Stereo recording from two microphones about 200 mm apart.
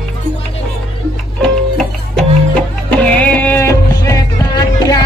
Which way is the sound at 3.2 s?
10° left (ahead or behind).